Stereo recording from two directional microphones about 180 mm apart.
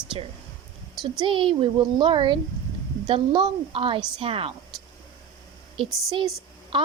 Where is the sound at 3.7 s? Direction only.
30° right (ahead or behind).